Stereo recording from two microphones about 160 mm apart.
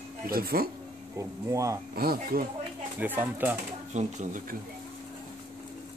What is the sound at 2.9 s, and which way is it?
Speech, 10° right (ahead or behind).